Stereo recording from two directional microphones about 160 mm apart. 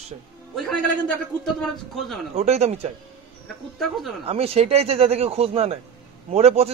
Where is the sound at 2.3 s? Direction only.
45° right (ahead or behind).